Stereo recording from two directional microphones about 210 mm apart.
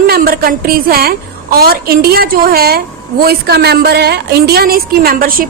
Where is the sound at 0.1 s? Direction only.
45° right (ahead or behind).